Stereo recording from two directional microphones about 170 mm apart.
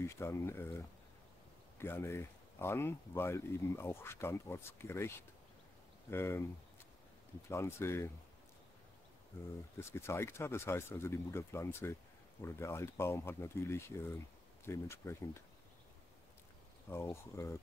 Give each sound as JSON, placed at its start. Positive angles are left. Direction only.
{"t": 0.0, "sound": "speech", "side_deg": 15}
{"t": 7.4, "sound": "speech", "side_deg": 15}
{"t": 9.8, "sound": "speech", "side_deg": 15}
{"t": 16.9, "sound": "speech", "side_deg": 15}